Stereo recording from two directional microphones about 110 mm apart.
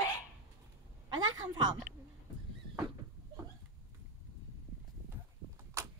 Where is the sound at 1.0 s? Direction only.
40° right (ahead or behind).